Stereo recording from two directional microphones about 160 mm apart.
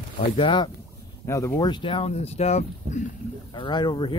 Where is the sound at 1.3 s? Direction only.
20° left (ahead or behind); by 3.0 s 45° left (ahead or behind).